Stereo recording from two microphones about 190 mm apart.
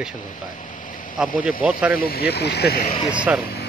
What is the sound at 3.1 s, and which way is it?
Speech, 5° right (ahead or behind).